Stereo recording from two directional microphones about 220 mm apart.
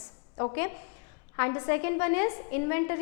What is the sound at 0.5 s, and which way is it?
A woman's voice, 10° left (ahead or behind).